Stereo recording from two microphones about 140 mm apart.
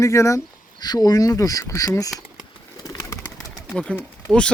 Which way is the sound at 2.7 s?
25° left (ahead or behind).